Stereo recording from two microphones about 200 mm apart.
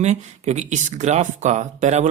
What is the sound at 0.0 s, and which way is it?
Speech, 35° right (ahead or behind).